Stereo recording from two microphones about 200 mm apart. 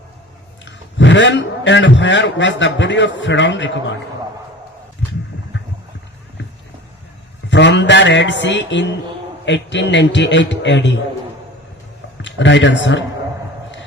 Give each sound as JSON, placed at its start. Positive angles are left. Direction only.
{"t": 0.6, "sound": "a man's voice", "side_deg": 65}
{"t": 7.5, "sound": "a man's voice", "side_deg": 60}
{"t": 12.2, "sound": "speech", "side_deg": 65}